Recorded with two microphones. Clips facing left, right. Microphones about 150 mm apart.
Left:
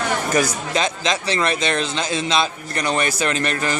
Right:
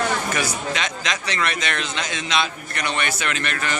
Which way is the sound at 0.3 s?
35° left (ahead or behind).